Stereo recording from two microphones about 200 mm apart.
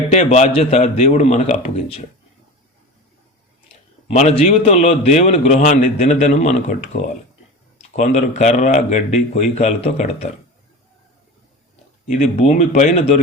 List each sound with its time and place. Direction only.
0.1 s a man's voice: 35° left (ahead or behind)
4.1 s a man's voice: 35° left (ahead or behind)
12.0 s a man's voice: 35° left (ahead or behind)